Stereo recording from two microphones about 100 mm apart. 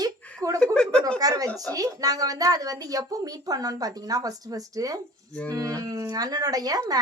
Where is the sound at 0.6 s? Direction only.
10° left (ahead or behind).